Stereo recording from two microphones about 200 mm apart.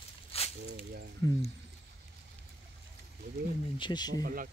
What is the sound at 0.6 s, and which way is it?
Snake, 50° right (ahead or behind).